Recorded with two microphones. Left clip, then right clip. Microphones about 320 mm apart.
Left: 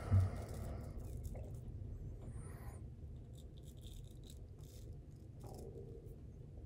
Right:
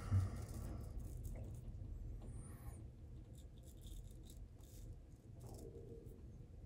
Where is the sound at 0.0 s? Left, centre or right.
Centre.